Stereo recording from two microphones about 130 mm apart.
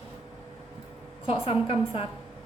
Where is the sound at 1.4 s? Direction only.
45° left (ahead or behind).